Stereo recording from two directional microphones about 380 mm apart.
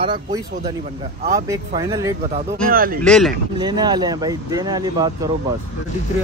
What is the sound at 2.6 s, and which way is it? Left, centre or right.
Speech, right.